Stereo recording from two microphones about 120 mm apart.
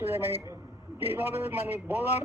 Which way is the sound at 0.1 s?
20° right (ahead or behind).